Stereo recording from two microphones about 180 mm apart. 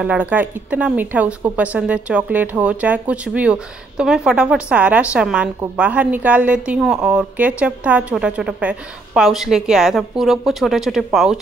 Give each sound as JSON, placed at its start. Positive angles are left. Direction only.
{"t": 0.0, "sound": "speech", "side_deg": -10}